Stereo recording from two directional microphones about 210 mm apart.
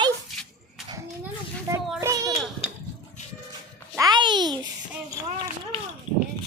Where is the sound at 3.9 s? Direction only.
20° right (ahead or behind).